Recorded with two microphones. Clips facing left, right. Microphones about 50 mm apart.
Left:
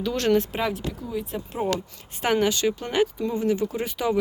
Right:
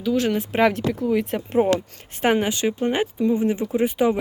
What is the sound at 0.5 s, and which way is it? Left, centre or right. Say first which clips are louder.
Speech: right 8 dB; right.